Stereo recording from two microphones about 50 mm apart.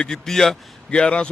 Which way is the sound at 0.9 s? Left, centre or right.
Left.